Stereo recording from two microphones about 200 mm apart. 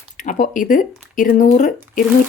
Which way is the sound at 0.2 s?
40° left (ahead or behind).